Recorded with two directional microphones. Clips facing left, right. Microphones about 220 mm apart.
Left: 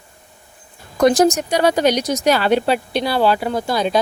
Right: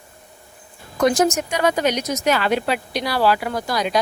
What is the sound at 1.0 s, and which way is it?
Speech, 35° left (ahead or behind).